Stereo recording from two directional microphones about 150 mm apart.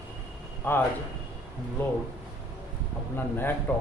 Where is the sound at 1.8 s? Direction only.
15° left (ahead or behind).